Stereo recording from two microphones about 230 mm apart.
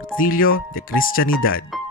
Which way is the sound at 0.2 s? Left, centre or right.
Left.